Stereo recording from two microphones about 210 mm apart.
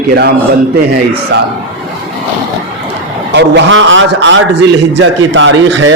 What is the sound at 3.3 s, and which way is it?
A man's voice, 60° right (ahead or behind).